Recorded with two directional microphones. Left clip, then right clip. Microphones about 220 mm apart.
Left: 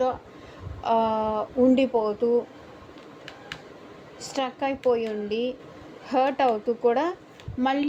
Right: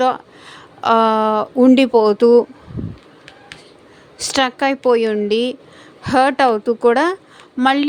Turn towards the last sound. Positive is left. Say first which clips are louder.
# right 10 dB
turn(degrees=-35)  # may be behind; listen again after turning